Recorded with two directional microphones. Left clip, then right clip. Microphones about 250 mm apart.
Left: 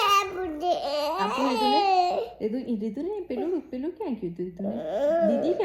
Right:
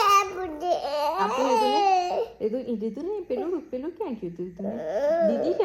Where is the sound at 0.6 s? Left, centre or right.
Centre.